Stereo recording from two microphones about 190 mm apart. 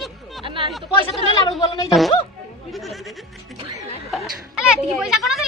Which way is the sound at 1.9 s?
Centre (ahead or behind).